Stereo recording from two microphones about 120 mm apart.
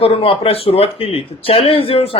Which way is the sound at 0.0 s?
50° left (ahead or behind).